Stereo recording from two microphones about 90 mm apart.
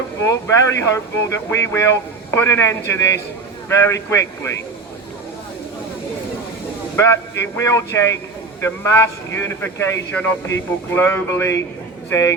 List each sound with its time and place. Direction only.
0.2 s speech: 35° left (ahead or behind)
6.9 s speech: 30° left (ahead or behind)